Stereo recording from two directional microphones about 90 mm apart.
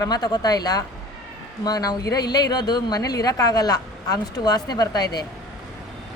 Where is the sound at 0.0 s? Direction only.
45° left (ahead or behind).